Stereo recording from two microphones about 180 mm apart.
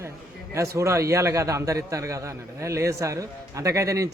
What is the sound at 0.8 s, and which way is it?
A man's voice, 15° right (ahead or behind).